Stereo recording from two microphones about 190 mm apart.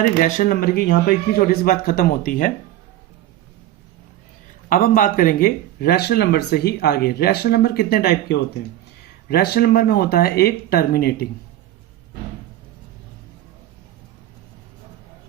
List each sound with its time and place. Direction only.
0.2 s speech: 45° left (ahead or behind)
4.7 s speech: 45° left (ahead or behind)